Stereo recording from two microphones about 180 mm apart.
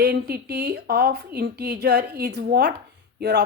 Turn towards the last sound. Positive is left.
turn(degrees=-65)  # may be behind; listen again after turning